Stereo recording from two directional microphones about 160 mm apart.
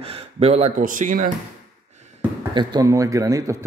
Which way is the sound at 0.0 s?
40° right (ahead or behind).